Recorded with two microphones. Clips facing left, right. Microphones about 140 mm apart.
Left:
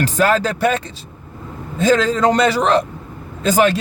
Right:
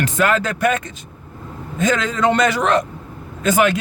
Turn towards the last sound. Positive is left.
turn(degrees=35)  # may be behind; listen again after turning